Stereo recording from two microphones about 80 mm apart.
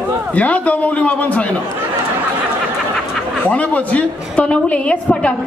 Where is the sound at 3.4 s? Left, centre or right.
Centre.